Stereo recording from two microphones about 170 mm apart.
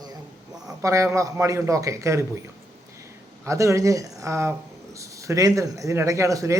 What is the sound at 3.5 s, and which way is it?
Speech, 15° right (ahead or behind).